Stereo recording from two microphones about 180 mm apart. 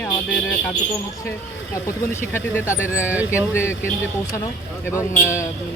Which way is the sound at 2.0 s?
15° left (ahead or behind).